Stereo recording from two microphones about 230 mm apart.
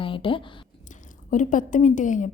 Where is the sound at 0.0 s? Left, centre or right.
Left.